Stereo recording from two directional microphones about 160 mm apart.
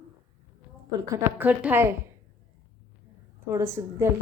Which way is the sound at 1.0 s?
10° right (ahead or behind).